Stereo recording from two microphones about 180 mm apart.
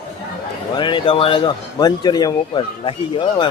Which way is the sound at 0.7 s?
25° left (ahead or behind).